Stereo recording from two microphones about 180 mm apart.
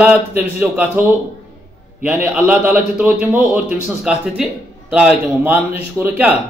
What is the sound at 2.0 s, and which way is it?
A man's voice, 5° right (ahead or behind).